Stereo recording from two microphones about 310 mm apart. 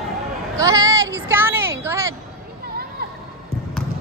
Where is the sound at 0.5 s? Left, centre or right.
Centre.